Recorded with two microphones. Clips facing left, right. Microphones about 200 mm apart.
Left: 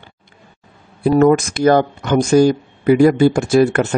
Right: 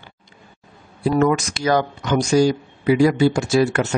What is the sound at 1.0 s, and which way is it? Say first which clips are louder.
Speech: left 6 dB; 50° left (ahead or behind).